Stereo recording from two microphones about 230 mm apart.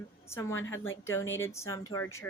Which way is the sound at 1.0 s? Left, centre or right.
Centre.